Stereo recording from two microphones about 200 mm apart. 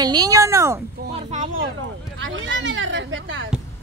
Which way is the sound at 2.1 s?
70° right (ahead or behind).